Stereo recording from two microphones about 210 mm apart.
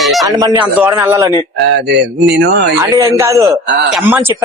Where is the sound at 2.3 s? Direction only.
55° right (ahead or behind).